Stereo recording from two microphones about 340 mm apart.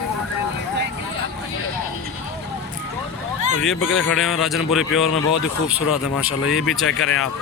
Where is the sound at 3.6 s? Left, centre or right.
Centre.